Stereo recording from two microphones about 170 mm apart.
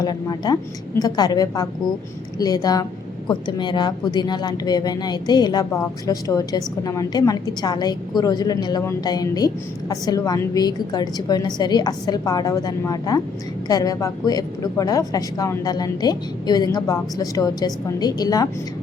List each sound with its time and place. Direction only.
0.0 s a woman's voice: 25° left (ahead or behind)